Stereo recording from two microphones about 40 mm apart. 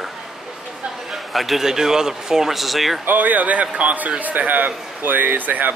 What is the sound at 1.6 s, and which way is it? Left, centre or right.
A man's voice, centre.